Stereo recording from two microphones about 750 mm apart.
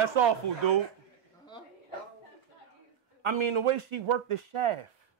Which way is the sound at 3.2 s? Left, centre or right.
Right.